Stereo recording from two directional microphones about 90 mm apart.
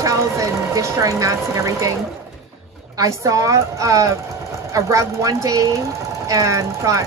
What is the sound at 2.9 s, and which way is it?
Speech, 40° right (ahead or behind).